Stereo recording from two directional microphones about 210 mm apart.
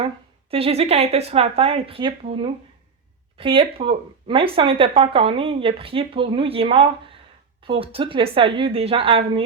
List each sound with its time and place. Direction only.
0.5 s speech: 30° right (ahead or behind)